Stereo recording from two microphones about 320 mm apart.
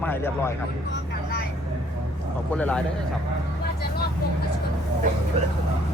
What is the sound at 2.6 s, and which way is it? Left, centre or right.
Speech, centre.